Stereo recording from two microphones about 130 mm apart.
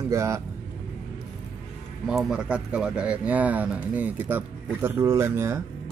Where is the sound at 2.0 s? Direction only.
5° right (ahead or behind).